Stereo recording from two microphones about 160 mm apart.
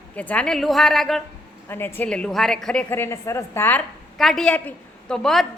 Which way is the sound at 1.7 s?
15° left (ahead or behind).